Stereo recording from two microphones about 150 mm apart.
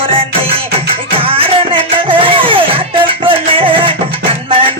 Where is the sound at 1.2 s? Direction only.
40° right (ahead or behind).